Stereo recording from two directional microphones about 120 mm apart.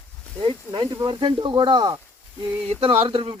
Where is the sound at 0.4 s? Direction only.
45° right (ahead or behind).